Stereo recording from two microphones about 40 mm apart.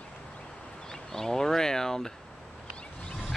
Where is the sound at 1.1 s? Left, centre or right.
Centre.